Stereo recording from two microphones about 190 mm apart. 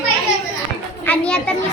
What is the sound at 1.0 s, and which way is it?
Speech, 5° left (ahead or behind).